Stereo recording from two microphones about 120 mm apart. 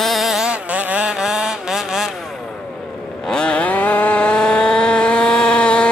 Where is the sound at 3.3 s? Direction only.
10° left (ahead or behind).